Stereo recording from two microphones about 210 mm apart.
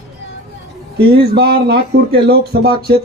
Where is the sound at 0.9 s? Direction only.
50° right (ahead or behind).